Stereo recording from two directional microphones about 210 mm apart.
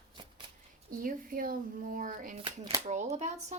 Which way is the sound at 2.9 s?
30° right (ahead or behind).